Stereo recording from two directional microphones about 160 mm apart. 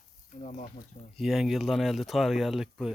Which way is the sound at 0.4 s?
55° left (ahead or behind).